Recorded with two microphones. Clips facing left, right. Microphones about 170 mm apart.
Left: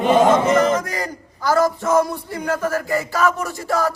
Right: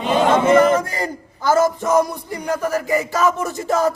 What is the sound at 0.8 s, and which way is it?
Speech, 30° right (ahead or behind).